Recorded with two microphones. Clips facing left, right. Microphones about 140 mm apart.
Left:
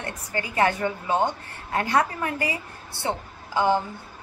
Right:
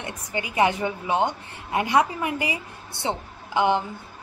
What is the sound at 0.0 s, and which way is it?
A woman's voice, 15° right (ahead or behind).